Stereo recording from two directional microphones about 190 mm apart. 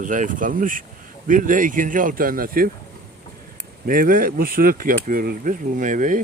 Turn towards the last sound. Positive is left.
turn(degrees=-45)  # may be behind; listen again after turning